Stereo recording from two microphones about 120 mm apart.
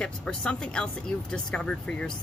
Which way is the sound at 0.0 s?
5° left (ahead or behind).